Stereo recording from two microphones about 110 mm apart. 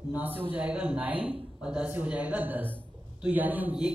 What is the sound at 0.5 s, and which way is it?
Speech, 10° right (ahead or behind).